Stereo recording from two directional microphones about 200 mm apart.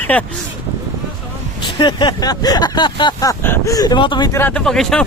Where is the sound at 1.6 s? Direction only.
25° left (ahead or behind).